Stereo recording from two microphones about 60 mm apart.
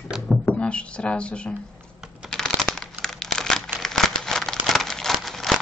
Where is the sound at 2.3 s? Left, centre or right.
Centre.